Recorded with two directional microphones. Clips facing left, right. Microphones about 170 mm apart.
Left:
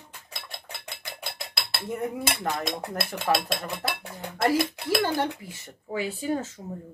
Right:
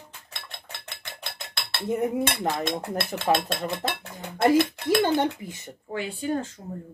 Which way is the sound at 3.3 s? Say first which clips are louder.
Right 2 dB; 25° right (ahead or behind).